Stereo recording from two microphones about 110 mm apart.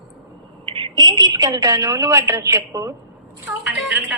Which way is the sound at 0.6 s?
55° right (ahead or behind).